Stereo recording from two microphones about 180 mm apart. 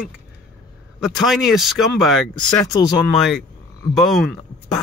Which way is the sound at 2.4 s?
25° left (ahead or behind).